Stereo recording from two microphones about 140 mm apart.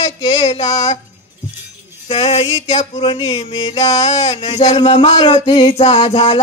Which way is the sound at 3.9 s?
55° left (ahead or behind).